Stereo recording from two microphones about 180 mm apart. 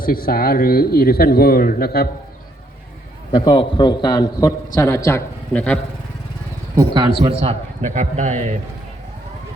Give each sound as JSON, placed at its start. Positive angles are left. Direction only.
{"t": 0.0, "sound": "speech", "side_deg": 55}
{"t": 3.3, "sound": "a man's voice", "side_deg": 25}
{"t": 6.7, "sound": "a man's voice", "side_deg": -25}